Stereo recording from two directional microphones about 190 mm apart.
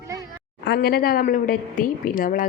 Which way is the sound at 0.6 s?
55° left (ahead or behind).